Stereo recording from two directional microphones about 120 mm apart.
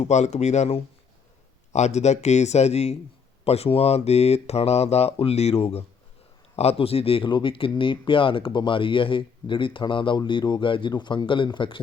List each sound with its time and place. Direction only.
0.0 s speech: 75° left (ahead or behind); by 11.8 s 40° left (ahead or behind)